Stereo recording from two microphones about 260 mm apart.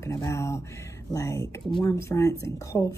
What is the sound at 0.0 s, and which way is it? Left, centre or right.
Speech, centre.